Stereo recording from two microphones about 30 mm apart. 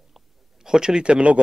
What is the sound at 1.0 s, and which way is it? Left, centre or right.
Speech, right.